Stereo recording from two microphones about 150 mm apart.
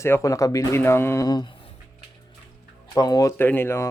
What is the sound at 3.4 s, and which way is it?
Speech, 15° left (ahead or behind).